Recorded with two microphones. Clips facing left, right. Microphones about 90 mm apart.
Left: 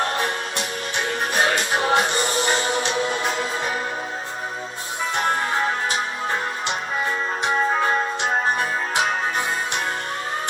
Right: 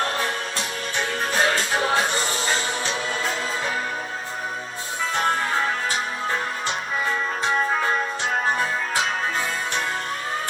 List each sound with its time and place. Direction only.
1.3 s music: 20° left (ahead or behind)